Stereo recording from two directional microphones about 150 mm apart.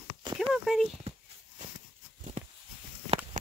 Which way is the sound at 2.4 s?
50° right (ahead or behind).